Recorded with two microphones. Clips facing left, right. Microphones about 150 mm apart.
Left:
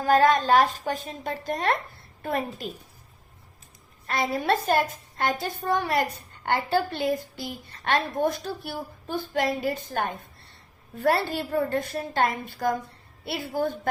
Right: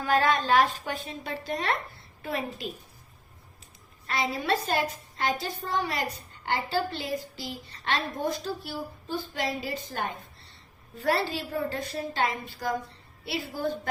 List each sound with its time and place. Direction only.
0.0 s a woman's voice: 45° left (ahead or behind)
4.0 s a woman's voice: 50° left (ahead or behind)